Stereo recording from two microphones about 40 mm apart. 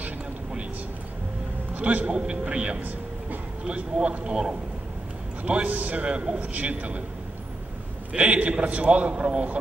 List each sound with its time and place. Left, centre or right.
1.8 s a man's voice: right
5.4 s a man's voice: right
6.0 s a man's voice: right
8.2 s a man's voice: right